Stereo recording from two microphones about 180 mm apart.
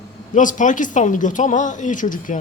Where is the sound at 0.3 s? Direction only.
45° left (ahead or behind).